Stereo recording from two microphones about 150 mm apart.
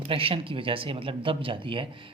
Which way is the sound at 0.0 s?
40° right (ahead or behind).